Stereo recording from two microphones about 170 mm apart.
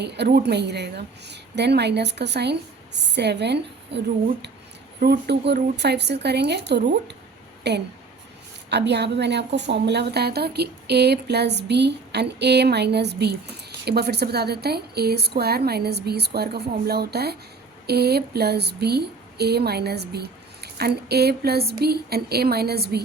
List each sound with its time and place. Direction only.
0.0 s a woman's voice: 80° right
4.9 s a woman's voice: 60° right (ahead or behind)
5.7 s a woman's voice: 85° right